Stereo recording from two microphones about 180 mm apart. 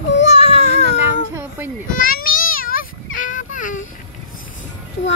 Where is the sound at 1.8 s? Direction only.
50° left (ahead or behind).